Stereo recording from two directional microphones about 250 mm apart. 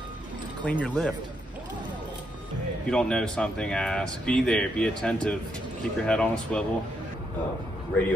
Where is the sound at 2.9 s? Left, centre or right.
Centre.